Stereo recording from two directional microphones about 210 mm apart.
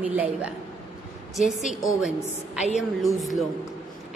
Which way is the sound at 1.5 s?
Centre (ahead or behind).